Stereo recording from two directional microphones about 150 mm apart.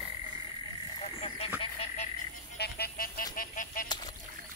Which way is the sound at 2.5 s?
90° left.